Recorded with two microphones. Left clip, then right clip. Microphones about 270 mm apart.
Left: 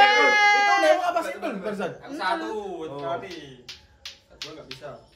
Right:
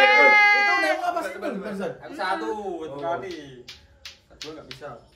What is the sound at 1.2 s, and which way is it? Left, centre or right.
Speech, centre.